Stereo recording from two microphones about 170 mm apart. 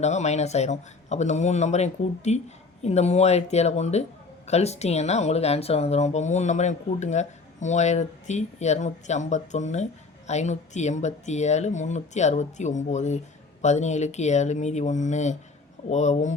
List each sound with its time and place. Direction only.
0.0 s speech: 40° left (ahead or behind)